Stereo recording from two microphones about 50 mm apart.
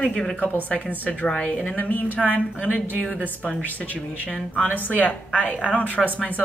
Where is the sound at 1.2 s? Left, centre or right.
Centre.